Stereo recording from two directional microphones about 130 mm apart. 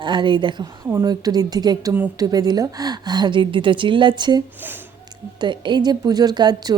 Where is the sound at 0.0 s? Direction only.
40° right (ahead or behind).